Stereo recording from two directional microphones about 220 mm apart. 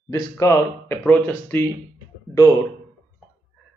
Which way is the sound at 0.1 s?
15° left (ahead or behind).